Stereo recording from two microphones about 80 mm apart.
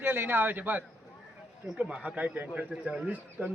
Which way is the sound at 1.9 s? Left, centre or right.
Centre.